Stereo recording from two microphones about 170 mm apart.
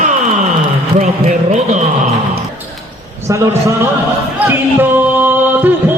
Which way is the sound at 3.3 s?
20° right (ahead or behind).